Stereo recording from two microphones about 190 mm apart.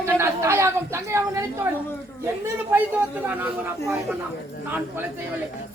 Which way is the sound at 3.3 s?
10° right (ahead or behind).